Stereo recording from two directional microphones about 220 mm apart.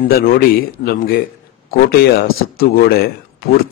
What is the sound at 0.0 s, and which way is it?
A man's voice, 40° left (ahead or behind).